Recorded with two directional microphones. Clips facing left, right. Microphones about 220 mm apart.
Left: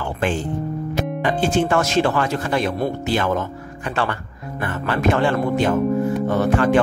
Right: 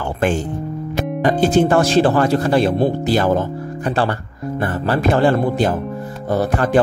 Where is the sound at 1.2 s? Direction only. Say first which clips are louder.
Right 6 dB; 40° right (ahead or behind).